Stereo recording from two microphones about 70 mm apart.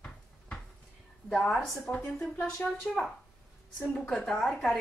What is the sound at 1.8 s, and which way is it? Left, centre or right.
Speech, centre.